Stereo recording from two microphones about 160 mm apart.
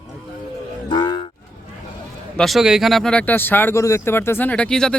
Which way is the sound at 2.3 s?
Centre (ahead or behind).